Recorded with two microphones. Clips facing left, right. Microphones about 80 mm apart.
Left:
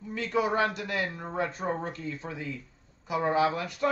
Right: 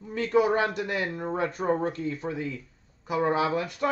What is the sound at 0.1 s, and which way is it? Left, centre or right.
A man's voice, right.